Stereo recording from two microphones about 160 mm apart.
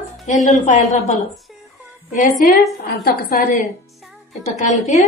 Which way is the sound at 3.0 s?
70° left (ahead or behind).